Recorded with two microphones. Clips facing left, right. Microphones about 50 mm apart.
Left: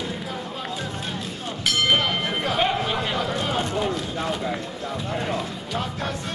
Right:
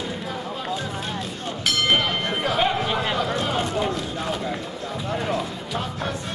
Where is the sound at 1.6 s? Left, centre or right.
Centre.